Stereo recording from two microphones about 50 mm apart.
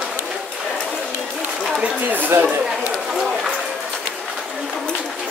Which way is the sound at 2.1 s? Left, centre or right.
Right.